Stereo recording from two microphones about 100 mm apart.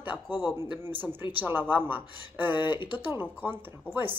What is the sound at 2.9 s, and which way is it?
Speech, 20° right (ahead or behind).